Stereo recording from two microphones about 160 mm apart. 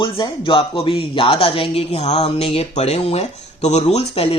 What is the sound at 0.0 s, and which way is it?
Speech, 30° left (ahead or behind).